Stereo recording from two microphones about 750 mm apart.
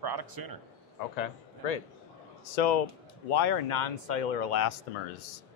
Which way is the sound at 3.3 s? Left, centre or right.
Left.